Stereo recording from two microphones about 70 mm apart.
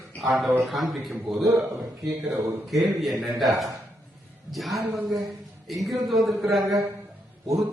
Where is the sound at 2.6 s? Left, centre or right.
Centre.